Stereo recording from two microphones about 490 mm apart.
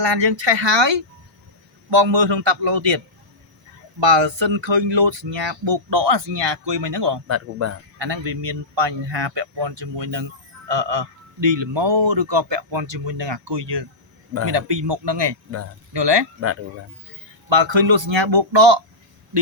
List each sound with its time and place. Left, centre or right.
0.0 s speech: right
4.0 s speech: right
7.3 s speech: right
7.9 s speech: right
17.5 s speech: right